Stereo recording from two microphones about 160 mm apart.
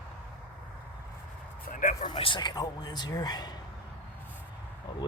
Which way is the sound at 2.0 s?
30° left (ahead or behind).